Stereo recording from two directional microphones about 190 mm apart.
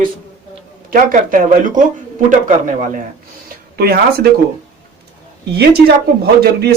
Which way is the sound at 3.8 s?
55° right (ahead or behind).